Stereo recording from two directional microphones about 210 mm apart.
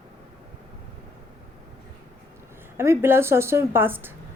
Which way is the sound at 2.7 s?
10° right (ahead or behind).